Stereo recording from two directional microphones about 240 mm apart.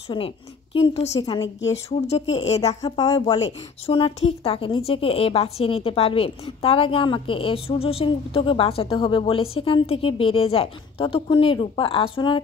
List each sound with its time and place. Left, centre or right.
0.1 s a woman's voice: centre
1.9 s a woman's voice: left
2.8 s a woman's voice: centre